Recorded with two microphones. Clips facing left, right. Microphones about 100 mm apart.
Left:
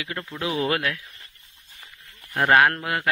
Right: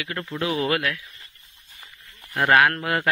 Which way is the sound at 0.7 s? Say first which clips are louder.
Right 1 dB; 25° left (ahead or behind).